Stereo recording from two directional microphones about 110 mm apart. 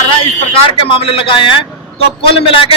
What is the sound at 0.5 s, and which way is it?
A man's voice, 60° left (ahead or behind).